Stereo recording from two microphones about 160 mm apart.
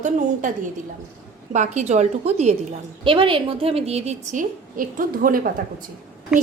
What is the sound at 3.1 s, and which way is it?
A woman's voice, 35° right (ahead or behind).